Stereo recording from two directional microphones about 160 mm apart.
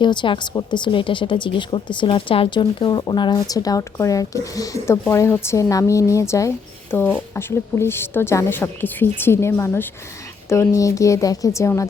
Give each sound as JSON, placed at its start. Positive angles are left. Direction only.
{"t": 0.0, "sound": "a woman's voice", "side_deg": 30}